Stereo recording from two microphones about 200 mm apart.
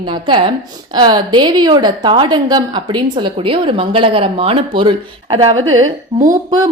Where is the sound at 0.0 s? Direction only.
25° right (ahead or behind).